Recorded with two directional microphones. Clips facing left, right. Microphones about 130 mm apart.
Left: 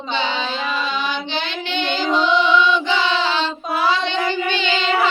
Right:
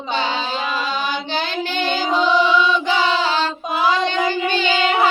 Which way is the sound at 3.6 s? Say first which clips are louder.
Right 1 dB; 15° right (ahead or behind).